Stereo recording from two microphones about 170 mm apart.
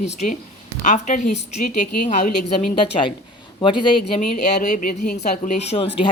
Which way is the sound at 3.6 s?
30° left (ahead or behind).